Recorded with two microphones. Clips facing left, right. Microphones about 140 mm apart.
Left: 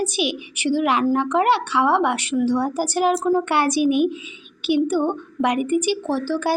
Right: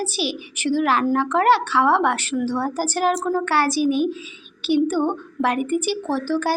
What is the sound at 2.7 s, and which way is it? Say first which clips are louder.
A woman's voice: left 1 dB; 10° left (ahead or behind).